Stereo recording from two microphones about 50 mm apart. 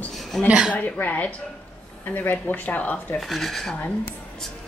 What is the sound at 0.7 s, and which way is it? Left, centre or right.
Speech, left.